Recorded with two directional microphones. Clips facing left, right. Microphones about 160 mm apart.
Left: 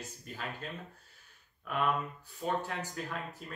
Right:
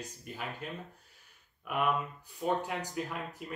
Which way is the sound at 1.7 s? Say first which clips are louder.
Right 1 dB; 10° right (ahead or behind).